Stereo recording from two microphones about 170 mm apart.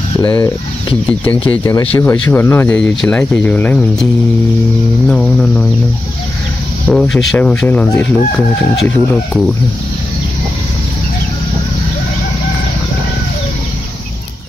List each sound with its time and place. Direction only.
0.2 s speech: 25° left (ahead or behind)
2.0 s speech: 15° left (ahead or behind)
5.0 s speech: 5° left (ahead or behind)
6.9 s speech: 5° left (ahead or behind)